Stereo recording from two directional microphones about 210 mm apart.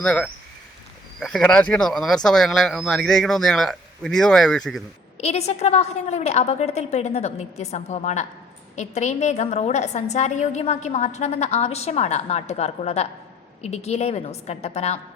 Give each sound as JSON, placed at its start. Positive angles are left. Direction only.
{"t": 0.0, "sound": "speech", "side_deg": 5}
{"t": 5.2, "sound": "a woman's voice", "side_deg": 30}